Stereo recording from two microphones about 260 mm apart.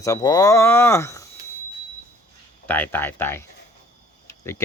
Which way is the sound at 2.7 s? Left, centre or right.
Centre.